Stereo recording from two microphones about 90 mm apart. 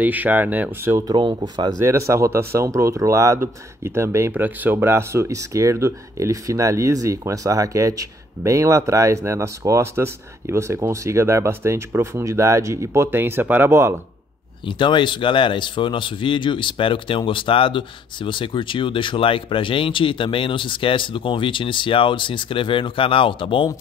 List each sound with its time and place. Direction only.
0.0 s speech: 20° right (ahead or behind)
1.1 s speech: 55° right (ahead or behind)
1.8 s speech: 30° right (ahead or behind)
4.3 s speech: 20° right (ahead or behind)
14.7 s speech: 60° left (ahead or behind)